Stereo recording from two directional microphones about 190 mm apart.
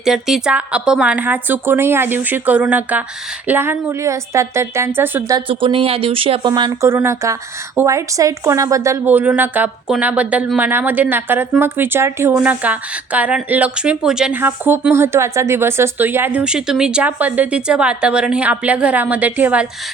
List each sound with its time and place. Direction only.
0.0 s a woman's voice: centre (ahead or behind)
5.5 s speech: 30° right (ahead or behind)
6.5 s a woman's voice: 15° right (ahead or behind)